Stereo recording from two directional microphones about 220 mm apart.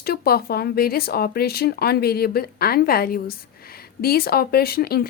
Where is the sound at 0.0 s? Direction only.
45° left (ahead or behind).